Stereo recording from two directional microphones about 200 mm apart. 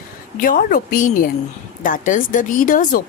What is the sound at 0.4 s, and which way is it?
A woman's voice, 45° left (ahead or behind).